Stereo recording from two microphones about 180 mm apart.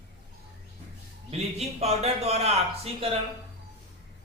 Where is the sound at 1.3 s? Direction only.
35° right (ahead or behind).